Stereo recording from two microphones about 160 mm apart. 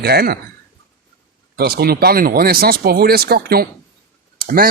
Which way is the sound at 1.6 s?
70° right (ahead or behind).